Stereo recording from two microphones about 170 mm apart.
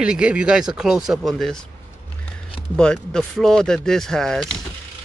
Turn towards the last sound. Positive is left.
turn(degrees=5)  # may be behind; listen again after turning